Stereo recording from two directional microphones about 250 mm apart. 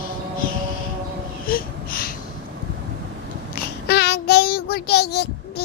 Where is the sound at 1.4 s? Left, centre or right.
Left.